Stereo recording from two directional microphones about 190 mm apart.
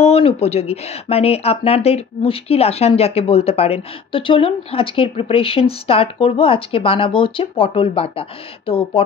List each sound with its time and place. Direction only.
0.0 s speech: 30° left (ahead or behind)